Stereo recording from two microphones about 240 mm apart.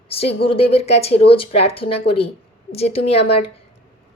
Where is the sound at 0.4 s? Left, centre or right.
Left.